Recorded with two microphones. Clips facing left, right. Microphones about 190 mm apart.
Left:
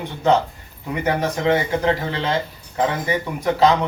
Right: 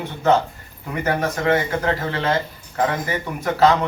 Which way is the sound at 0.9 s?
15° left (ahead or behind).